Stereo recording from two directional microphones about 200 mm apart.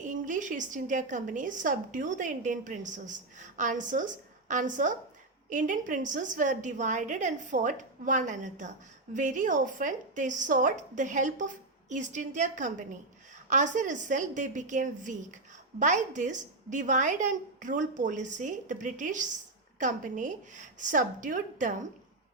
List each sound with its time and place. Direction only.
0.0 s a woman's voice: 40° right (ahead or behind)